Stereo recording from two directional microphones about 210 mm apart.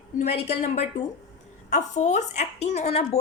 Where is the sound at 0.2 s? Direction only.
35° left (ahead or behind).